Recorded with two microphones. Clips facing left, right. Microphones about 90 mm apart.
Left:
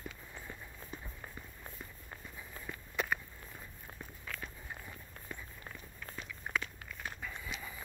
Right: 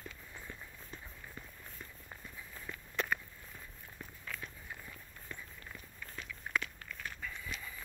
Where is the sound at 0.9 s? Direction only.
10° left (ahead or behind).